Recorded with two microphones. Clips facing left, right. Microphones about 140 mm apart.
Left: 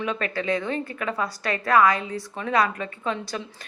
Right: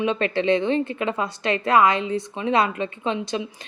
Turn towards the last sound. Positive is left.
turn(degrees=-20)  # may be behind; listen again after turning